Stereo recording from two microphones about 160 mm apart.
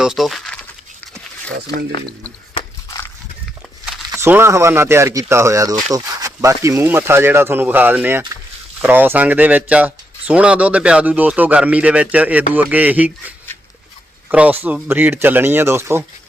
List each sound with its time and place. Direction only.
0.0 s speech: centre (ahead or behind)
4.1 s speech: 15° right (ahead or behind)